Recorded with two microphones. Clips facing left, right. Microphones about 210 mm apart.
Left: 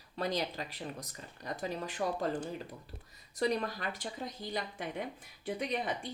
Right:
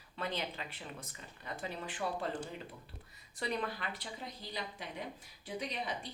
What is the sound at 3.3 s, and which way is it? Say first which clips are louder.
Speech: left 5 dB; 40° left (ahead or behind).